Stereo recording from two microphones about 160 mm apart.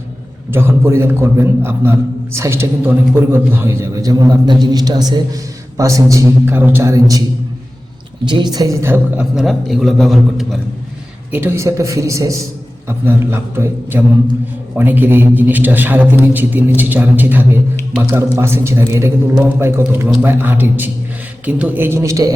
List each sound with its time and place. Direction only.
0.5 s a man's voice: 15° right (ahead or behind)
9.3 s a man's voice: centre (ahead or behind)
11.3 s a man's voice: 15° right (ahead or behind)